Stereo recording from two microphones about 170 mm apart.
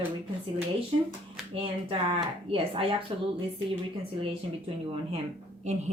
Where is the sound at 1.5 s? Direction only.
30° right (ahead or behind).